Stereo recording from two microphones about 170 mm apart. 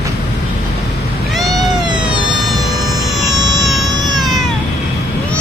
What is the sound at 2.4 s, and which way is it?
Music, centre (ahead or behind).